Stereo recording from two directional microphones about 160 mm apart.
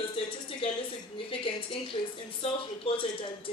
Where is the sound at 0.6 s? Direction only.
35° left (ahead or behind).